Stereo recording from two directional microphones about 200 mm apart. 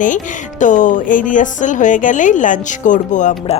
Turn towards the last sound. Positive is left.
turn(degrees=35)  # may be behind; listen again after turning